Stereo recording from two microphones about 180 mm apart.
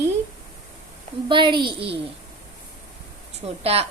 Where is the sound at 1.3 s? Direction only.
25° right (ahead or behind).